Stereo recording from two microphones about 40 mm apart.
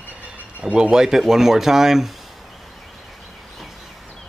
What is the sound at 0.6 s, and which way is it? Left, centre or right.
Speech, right.